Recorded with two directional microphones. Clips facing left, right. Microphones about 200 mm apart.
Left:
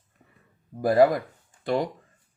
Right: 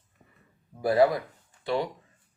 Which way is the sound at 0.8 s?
50° left (ahead or behind).